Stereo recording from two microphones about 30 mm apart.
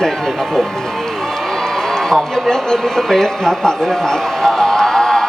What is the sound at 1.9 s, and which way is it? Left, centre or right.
A man's voice, centre.